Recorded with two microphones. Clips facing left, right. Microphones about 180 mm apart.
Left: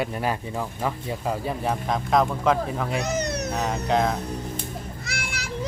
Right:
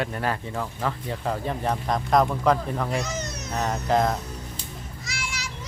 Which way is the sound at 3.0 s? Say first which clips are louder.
Left 6 dB; 65° left (ahead or behind).